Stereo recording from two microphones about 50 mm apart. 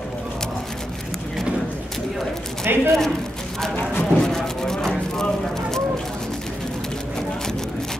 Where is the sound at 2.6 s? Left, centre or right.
Right.